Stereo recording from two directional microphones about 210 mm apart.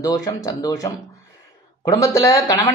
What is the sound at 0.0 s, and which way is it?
Speech, 15° left (ahead or behind).